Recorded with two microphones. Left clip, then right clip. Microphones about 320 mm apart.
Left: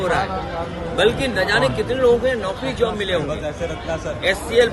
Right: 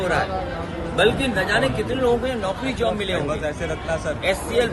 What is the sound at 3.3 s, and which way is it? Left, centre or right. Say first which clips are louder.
Speech: even; right.